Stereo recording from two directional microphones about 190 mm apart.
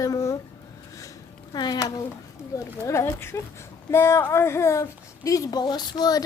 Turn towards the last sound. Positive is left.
turn(degrees=20)  # may be behind; listen again after turning